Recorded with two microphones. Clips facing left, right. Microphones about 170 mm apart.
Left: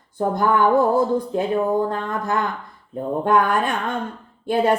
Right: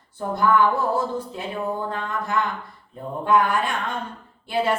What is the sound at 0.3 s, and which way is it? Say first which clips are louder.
A woman's voice: left 2 dB; 45° left (ahead or behind).